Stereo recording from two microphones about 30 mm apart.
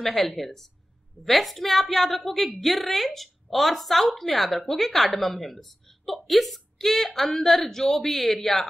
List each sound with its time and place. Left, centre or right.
0.0 s a woman's voice: centre